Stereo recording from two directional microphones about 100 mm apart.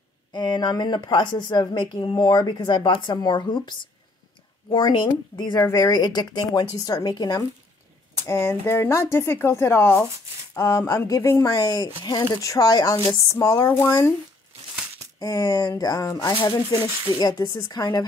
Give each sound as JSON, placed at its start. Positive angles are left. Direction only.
{"t": 0.3, "sound": "a woman's voice", "side_deg": 45}
{"t": 5.7, "sound": "speech", "side_deg": 30}
{"t": 5.9, "sound": "speech", "side_deg": 45}
{"t": 8.3, "sound": "speech", "side_deg": 25}
{"t": 12.0, "sound": "a woman's voice", "side_deg": 50}
{"t": 12.4, "sound": "speech", "side_deg": 35}
{"t": 15.1, "sound": "speech", "side_deg": 35}
{"t": 16.9, "sound": "speech", "side_deg": -45}
{"t": 17.2, "sound": "speech", "side_deg": 40}